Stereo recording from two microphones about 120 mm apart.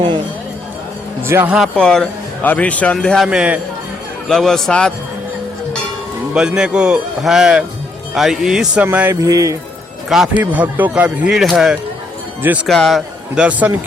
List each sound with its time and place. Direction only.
1.3 s speech: 20° right (ahead or behind)
1.5 s speech: 5° left (ahead or behind)
3.2 s speech: 10° right (ahead or behind)
4.3 s speech: 5° left (ahead or behind)
6.3 s speech: 5° right (ahead or behind)
8.8 s speech: 15° right (ahead or behind)
9.2 s speech: 25° right (ahead or behind)
10.1 s speech: 5° right (ahead or behind)
10.4 s speech: 15° right (ahead or behind)
12.4 s speech: 15° right (ahead or behind)
12.6 s speech: 5° left (ahead or behind)
13.3 s speech: 10° right (ahead or behind)